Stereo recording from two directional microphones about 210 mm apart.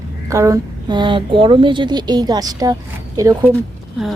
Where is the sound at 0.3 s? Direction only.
15° right (ahead or behind).